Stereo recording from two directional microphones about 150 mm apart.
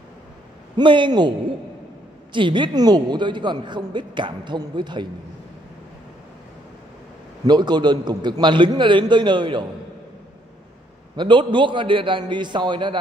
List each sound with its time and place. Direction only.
0.7 s a man's voice: 30° right (ahead or behind)
2.3 s a man's voice: 30° right (ahead or behind)
7.4 s a man's voice: 30° right (ahead or behind)
11.1 s a man's voice: 30° right (ahead or behind)